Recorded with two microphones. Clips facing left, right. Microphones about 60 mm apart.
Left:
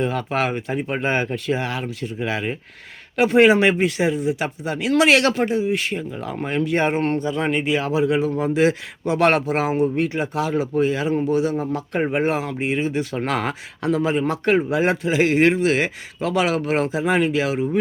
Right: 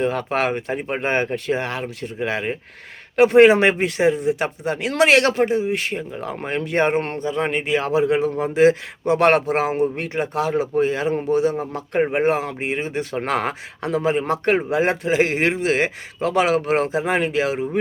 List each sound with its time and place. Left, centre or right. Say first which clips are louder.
0.0 s a man's voice: right 1 dB; right
10.1 s a man's voice: right 1 dB; right
15.4 s speech: left 4 dB; centre
15.7 s a man's voice: right 1 dB; right